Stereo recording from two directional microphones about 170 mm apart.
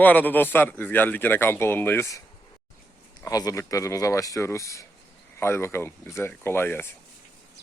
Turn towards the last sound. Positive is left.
turn(degrees=15)  # may be behind; listen again after turning